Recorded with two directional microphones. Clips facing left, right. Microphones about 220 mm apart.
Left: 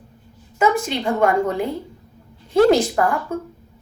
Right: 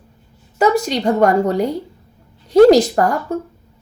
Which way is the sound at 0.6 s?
40° right (ahead or behind).